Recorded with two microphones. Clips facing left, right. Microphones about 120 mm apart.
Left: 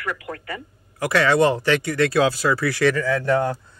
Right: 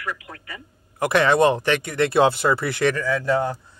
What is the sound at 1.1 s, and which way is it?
Speech, 20° right (ahead or behind).